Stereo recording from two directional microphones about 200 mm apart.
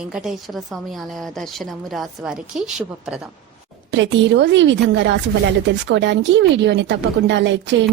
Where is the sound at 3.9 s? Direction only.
65° right (ahead or behind).